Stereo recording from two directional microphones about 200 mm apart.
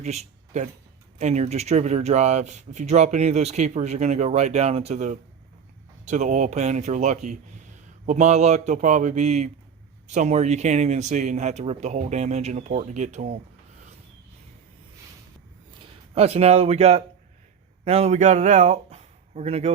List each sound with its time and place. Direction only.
0.0 s speech: 35° right (ahead or behind)
16.1 s a man's voice: 30° right (ahead or behind)